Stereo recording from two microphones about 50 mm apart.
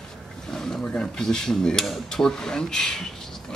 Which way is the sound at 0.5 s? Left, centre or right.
Centre.